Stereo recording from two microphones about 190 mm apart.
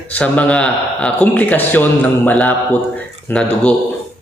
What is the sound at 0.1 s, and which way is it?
A woman's voice, 5° left (ahead or behind).